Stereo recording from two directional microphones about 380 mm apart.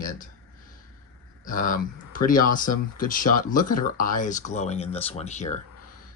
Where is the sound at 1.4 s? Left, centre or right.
Left.